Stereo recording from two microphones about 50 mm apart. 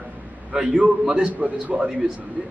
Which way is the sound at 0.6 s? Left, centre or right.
Right.